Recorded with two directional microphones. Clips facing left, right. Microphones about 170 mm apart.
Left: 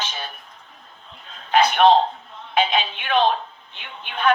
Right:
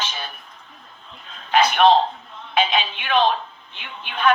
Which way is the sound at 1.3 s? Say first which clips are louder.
Even; 40° left (ahead or behind).